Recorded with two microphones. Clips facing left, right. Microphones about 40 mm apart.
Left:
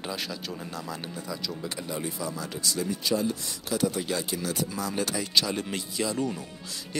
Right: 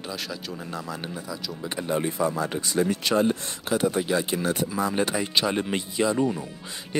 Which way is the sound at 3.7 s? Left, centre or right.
Right.